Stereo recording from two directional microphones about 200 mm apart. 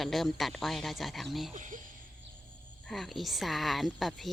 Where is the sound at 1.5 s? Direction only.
40° right (ahead or behind).